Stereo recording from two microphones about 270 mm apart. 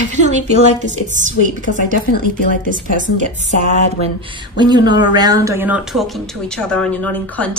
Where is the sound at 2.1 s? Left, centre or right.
Left.